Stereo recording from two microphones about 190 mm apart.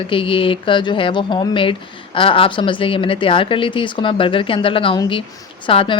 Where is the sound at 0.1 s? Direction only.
30° left (ahead or behind).